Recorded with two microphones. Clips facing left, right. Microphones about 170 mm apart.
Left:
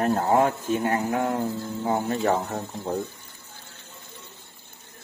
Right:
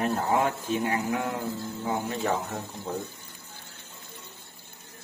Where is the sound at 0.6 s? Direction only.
50° left (ahead or behind).